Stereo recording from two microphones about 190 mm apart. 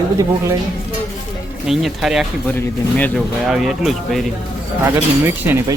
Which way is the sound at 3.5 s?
Centre (ahead or behind).